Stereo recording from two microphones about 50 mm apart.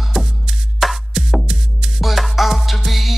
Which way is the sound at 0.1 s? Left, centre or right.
Centre.